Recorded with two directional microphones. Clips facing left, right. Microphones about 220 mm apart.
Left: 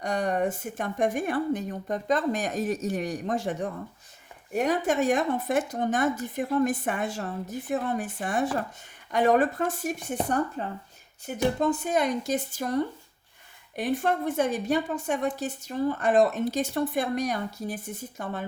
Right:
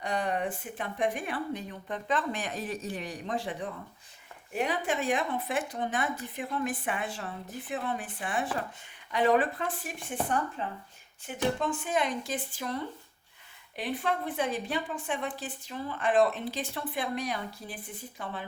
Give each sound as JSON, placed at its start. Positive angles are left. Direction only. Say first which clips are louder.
{"t": 0.0, "sound": "a woman's voice", "louder": "left 5 dB", "side_deg": 45}